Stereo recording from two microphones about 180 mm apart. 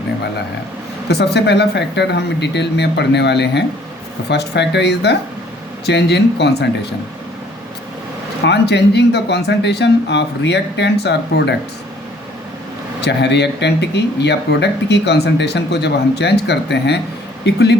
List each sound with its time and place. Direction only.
1.0 s speech: 65° left (ahead or behind)
8.4 s speech: 70° left (ahead or behind)
13.0 s speech: 70° left (ahead or behind)